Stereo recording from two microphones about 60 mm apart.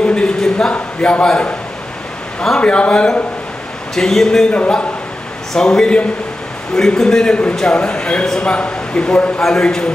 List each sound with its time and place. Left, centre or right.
0.0 s a sound: centre
0.7 s a man's voice: left
2.6 s a man's voice: centre